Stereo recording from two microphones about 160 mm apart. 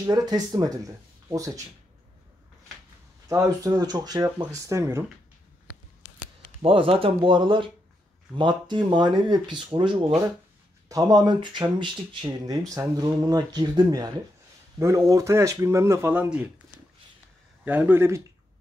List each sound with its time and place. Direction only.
0.0 s speech: 25° right (ahead or behind)
3.3 s speech: 20° right (ahead or behind)
6.6 s speech: 35° right (ahead or behind); by 16.4 s 10° right (ahead or behind)
17.6 s speech: 10° right (ahead or behind)